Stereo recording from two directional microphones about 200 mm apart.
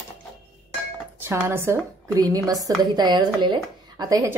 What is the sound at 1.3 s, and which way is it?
Cutlery, 10° right (ahead or behind).